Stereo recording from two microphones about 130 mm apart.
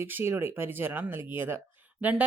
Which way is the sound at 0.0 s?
20° right (ahead or behind).